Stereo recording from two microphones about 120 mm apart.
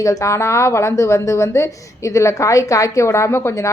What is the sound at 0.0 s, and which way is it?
A woman's voice, 25° left (ahead or behind).